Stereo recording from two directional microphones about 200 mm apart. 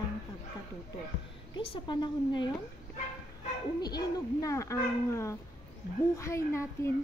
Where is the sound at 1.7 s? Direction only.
25° left (ahead or behind).